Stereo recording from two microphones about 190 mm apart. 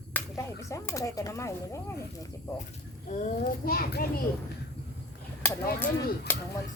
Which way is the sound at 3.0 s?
40° left (ahead or behind).